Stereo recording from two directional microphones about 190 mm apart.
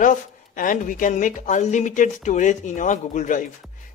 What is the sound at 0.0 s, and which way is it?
Speech, 45° left (ahead or behind).